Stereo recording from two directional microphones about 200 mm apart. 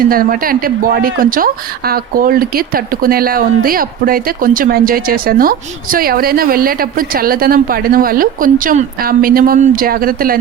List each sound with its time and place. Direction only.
0.0 s speech: 45° right (ahead or behind)